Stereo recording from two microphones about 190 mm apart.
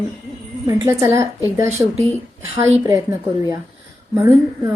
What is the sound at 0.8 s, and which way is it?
Speech, 15° right (ahead or behind).